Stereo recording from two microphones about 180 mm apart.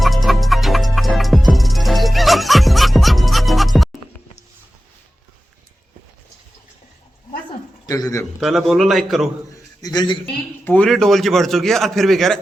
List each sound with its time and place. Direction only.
0.0 s music: centre (ahead or behind)
7.9 s speech: 20° left (ahead or behind)
8.4 s a man's voice: centre (ahead or behind)
9.8 s a man's voice: 20° left (ahead or behind)
10.6 s a man's voice: 10° left (ahead or behind)